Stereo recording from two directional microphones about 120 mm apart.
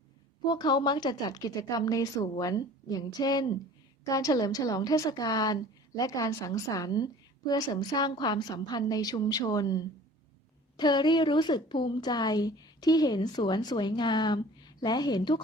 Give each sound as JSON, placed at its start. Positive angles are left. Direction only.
{"t": 0.4, "sound": "speech", "side_deg": 35}